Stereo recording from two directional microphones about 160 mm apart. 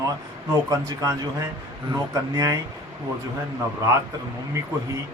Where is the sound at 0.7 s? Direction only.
20° right (ahead or behind).